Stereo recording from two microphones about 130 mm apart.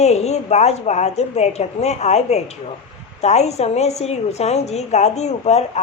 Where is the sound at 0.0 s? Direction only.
55° left (ahead or behind).